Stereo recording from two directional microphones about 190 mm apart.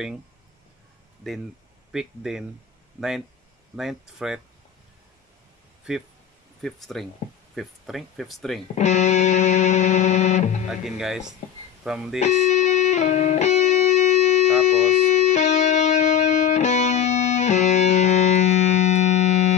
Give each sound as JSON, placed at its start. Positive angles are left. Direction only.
{"t": 1.9, "sound": "speech", "side_deg": -5}
{"t": 3.7, "sound": "speech", "side_deg": 0}
{"t": 6.6, "sound": "speech", "side_deg": 0}
{"t": 8.7, "sound": "music", "side_deg": 35}
{"t": 10.7, "sound": "speech", "side_deg": 0}
{"t": 12.2, "sound": "music", "side_deg": 35}